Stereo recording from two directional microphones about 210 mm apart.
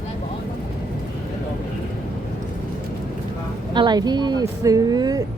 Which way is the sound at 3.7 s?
20° right (ahead or behind).